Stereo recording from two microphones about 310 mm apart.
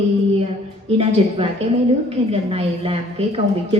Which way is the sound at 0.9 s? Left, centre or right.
Centre.